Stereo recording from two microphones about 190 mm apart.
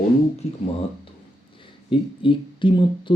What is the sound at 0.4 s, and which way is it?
Speech, 35° left (ahead or behind).